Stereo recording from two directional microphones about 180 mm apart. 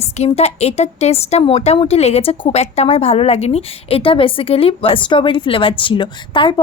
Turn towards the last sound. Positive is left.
turn(degrees=25)  # may be behind; listen again after turning